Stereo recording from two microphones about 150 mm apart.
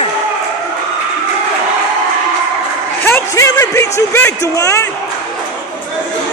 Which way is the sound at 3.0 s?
20° left (ahead or behind).